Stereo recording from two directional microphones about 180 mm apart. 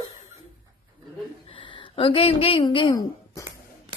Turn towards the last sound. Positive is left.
turn(degrees=20)  # may be behind; listen again after turning